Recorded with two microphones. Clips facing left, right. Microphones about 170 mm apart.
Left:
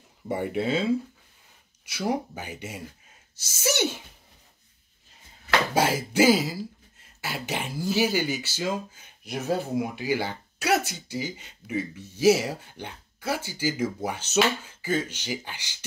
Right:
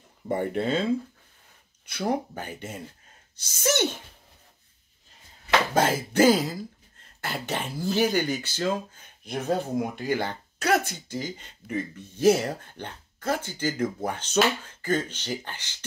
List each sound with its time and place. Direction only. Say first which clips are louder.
0.3 s speech: right 1 dB; 5° left (ahead or behind)
5.8 s speech: right 1 dB; 10° left (ahead or behind)
10.7 s speech: even; 55° right (ahead or behind)
11.1 s speech: left 1 dB; 10° left (ahead or behind)